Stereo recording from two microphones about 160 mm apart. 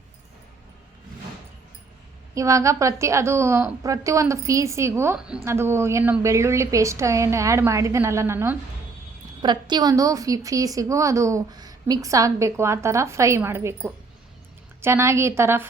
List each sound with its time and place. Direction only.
2.3 s a woman's voice: 20° right (ahead or behind)
9.4 s a woman's voice: 30° right (ahead or behind)